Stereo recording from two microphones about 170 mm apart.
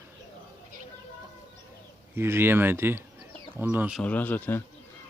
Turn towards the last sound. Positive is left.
turn(degrees=10)  # may be behind; listen again after turning